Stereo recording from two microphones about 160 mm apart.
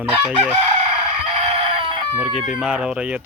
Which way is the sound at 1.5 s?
35° right (ahead or behind).